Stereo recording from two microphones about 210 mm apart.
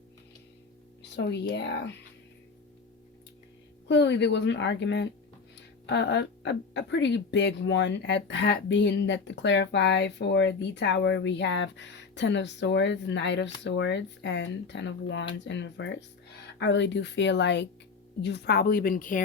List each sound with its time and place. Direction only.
1.1 s speech: 55° left (ahead or behind)
3.8 s a woman's voice: 55° left (ahead or behind); by 19.2 s 40° left (ahead or behind)